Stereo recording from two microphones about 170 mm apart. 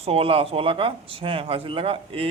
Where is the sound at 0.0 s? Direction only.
35° right (ahead or behind).